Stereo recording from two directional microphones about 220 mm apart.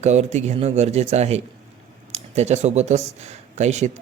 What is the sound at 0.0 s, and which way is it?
A man's voice, 30° right (ahead or behind).